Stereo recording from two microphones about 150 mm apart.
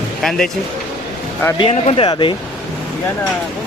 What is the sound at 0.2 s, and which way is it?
Speech, 5° left (ahead or behind).